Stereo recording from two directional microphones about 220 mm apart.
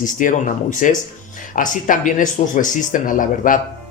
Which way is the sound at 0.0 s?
35° left (ahead or behind).